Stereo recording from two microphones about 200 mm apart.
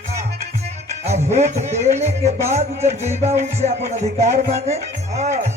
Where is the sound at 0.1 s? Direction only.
35° right (ahead or behind).